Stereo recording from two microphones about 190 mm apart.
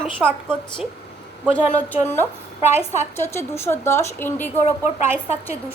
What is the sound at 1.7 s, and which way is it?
A woman's voice, 10° left (ahead or behind).